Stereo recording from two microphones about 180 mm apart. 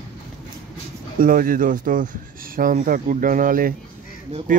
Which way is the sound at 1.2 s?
50° right (ahead or behind).